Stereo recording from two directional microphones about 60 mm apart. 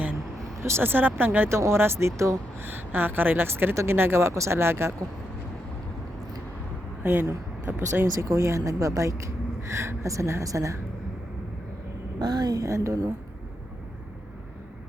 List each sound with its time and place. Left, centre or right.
0.6 s a woman's voice: right
1.5 s speech: right
2.6 s a woman's voice: right
7.0 s speech: right
8.0 s speech: right
12.4 s speech: right